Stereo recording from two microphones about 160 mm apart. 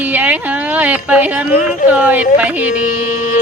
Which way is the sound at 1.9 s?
10° right (ahead or behind).